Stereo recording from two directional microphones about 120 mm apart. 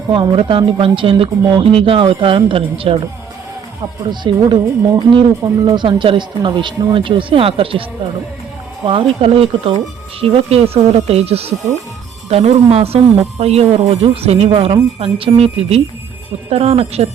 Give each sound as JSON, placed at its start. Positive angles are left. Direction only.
{"t": 0.1, "sound": "speech", "side_deg": -45}
{"t": 4.0, "sound": "speech", "side_deg": -40}
{"t": 5.6, "sound": "speech", "side_deg": -40}